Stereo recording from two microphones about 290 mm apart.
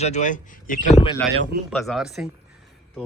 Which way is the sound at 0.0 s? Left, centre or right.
Left.